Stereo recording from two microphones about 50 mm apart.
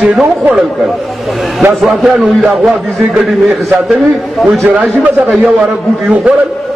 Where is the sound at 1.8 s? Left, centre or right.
Centre.